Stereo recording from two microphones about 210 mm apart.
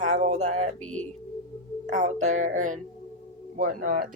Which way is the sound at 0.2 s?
30° right (ahead or behind).